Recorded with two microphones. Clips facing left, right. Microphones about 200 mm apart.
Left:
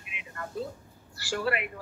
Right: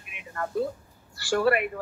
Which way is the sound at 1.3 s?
55° right (ahead or behind).